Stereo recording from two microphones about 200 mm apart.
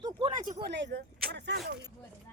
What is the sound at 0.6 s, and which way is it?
Speech, 60° right (ahead or behind).